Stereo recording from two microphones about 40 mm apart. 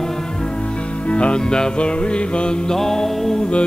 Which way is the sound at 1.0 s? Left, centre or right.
Left.